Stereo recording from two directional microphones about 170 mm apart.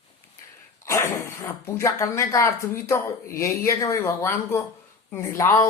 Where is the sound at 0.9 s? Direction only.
15° left (ahead or behind).